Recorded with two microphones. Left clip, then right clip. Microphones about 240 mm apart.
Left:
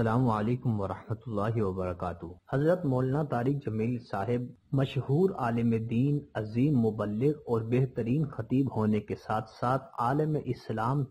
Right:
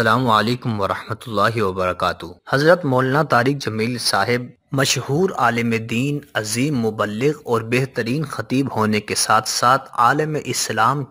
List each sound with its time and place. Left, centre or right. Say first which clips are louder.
0.0 s speech: right 13 dB; right